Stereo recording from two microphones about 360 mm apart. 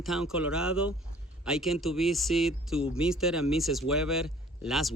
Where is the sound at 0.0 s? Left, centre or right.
Centre.